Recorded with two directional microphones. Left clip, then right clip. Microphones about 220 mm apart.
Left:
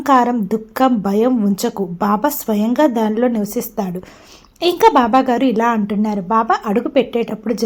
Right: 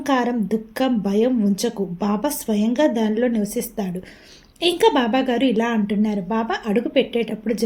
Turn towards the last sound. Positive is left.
turn(degrees=15)  # may be behind; listen again after turning